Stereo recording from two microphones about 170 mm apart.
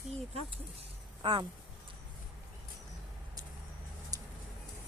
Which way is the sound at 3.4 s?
20° right (ahead or behind).